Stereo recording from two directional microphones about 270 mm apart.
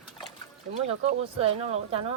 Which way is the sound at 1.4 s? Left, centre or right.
Right.